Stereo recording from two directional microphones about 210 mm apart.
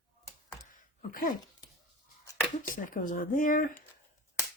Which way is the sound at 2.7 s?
40° left (ahead or behind).